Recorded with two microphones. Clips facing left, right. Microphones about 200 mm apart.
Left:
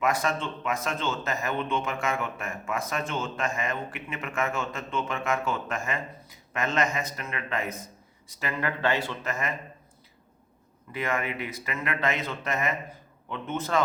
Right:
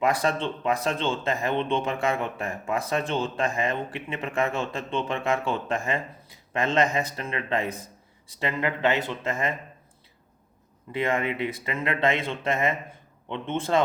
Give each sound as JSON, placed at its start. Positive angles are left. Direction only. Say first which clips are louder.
{"t": 0.0, "sound": "speech", "louder": "right 3 dB", "side_deg": -30}
{"t": 10.9, "sound": "speech", "louder": "right 4 dB", "side_deg": -30}